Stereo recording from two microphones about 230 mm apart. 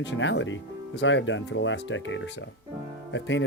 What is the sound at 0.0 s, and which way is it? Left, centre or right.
Speech, left.